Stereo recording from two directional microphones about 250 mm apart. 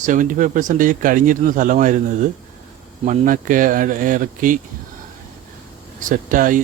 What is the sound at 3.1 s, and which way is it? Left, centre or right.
Speech, right.